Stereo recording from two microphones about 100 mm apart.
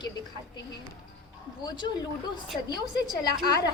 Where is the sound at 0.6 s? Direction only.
50° left (ahead or behind).